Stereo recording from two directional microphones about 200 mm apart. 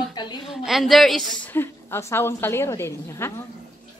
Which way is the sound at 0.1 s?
20° left (ahead or behind).